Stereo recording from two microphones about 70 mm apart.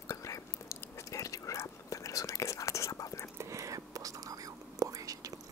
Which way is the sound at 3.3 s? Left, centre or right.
Right.